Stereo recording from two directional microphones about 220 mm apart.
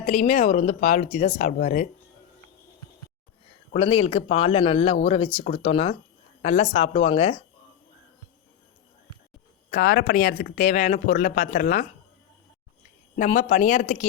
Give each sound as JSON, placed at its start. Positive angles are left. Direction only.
{"t": 0.0, "sound": "speech", "side_deg": 30}
{"t": 3.7, "sound": "speech", "side_deg": 30}
{"t": 9.6, "sound": "speech", "side_deg": 40}
{"t": 13.1, "sound": "speech", "side_deg": 40}